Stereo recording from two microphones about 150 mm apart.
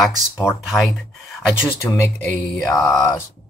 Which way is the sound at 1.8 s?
20° left (ahead or behind).